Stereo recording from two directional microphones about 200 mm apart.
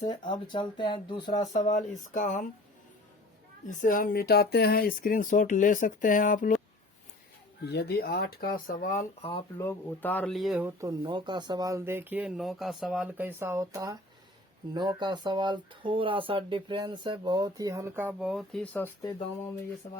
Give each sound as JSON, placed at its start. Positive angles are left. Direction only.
{"t": 0.0, "sound": "speech", "side_deg": 35}
{"t": 1.5, "sound": "speech", "side_deg": 35}
{"t": 3.7, "sound": "speech", "side_deg": 40}
{"t": 7.6, "sound": "speech", "side_deg": 55}
{"t": 9.6, "sound": "speech", "side_deg": 10}